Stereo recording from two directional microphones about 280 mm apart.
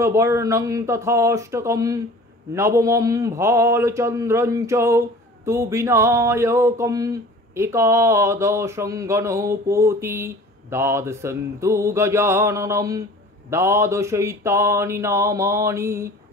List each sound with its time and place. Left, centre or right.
0.0 s a man's voice: centre